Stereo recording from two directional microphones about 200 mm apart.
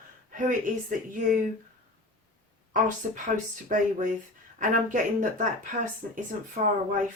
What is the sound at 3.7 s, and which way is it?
Speech, 40° right (ahead or behind).